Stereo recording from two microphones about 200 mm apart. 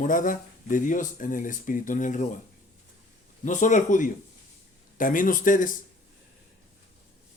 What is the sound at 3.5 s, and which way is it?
Speech, 40° left (ahead or behind).